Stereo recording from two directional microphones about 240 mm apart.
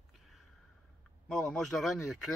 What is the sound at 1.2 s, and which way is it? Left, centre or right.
Speech, centre.